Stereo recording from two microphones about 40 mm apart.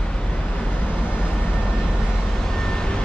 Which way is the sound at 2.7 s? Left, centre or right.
Centre.